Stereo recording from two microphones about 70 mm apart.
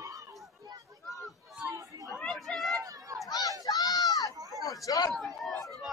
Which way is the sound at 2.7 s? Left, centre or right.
Right.